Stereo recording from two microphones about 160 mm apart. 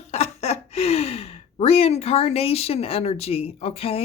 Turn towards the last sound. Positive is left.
turn(degrees=35)  # may be behind; listen again after turning